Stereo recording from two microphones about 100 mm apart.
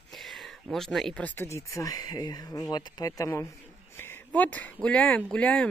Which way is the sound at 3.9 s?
20° left (ahead or behind).